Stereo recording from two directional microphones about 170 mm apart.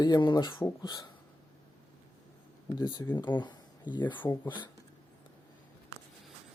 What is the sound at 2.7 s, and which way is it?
Speech, 25° left (ahead or behind).